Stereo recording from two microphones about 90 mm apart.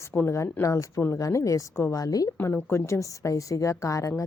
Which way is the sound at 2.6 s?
30° left (ahead or behind).